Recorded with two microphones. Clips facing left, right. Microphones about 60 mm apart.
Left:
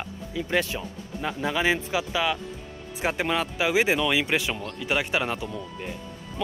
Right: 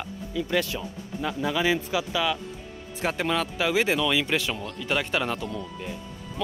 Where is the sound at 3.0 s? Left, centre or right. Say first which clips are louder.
Even; centre.